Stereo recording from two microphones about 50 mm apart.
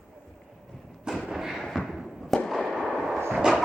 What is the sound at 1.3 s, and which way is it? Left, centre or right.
Thump, centre.